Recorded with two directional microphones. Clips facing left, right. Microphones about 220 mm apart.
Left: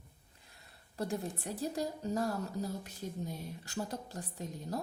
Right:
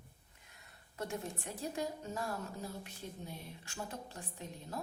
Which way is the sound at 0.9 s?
35° left (ahead or behind).